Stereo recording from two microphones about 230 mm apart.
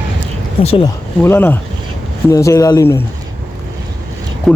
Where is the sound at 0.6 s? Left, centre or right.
Left.